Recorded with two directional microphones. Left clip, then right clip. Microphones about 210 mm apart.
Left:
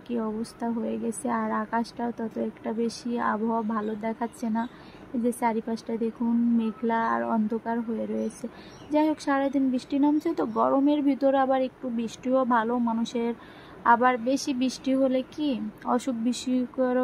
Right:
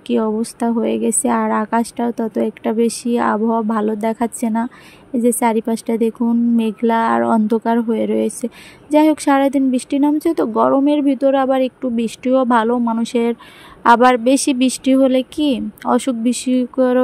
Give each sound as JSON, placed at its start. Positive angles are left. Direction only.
{"t": 0.0, "sound": "a woman's voice", "side_deg": -35}